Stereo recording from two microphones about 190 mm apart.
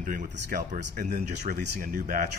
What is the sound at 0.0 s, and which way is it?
Speech, 45° right (ahead or behind).